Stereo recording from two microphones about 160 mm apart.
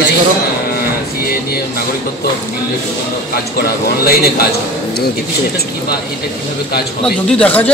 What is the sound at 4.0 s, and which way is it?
Speech, 75° left (ahead or behind).